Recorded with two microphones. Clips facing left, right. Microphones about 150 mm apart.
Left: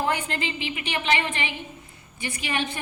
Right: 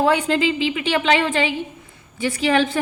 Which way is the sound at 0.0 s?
90° right.